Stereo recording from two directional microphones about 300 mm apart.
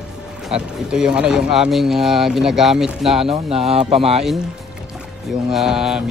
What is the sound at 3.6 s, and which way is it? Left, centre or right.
Speech, centre.